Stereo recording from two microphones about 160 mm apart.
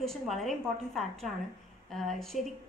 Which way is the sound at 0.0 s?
Centre (ahead or behind).